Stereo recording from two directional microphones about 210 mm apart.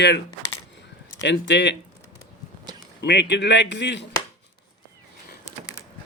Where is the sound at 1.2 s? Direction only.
55° left (ahead or behind).